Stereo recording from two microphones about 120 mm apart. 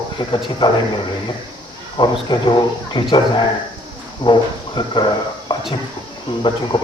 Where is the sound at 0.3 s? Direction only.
45° left (ahead or behind).